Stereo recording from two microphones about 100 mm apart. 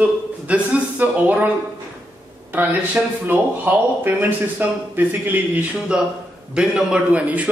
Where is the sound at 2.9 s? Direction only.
20° right (ahead or behind).